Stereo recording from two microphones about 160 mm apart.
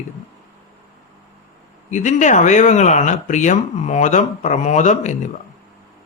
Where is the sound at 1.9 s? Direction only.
50° left (ahead or behind).